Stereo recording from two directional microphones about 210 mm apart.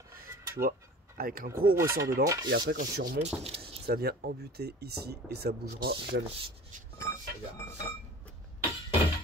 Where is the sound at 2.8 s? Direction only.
35° right (ahead or behind).